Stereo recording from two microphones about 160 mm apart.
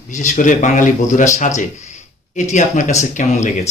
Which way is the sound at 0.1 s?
50° left (ahead or behind).